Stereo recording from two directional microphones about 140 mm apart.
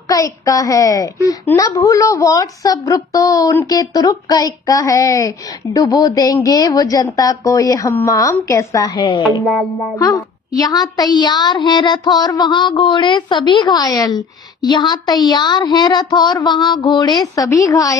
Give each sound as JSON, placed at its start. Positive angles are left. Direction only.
{"t": 0.1, "sound": "a woman's voice", "side_deg": 25}